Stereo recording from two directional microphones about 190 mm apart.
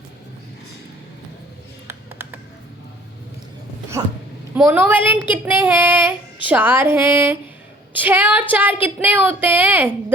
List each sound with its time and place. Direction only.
1.9 s computer keyboard: 10° right (ahead or behind)
4.0 s speech: 20° right (ahead or behind)